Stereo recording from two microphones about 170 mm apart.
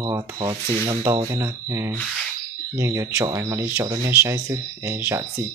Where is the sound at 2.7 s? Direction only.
15° right (ahead or behind).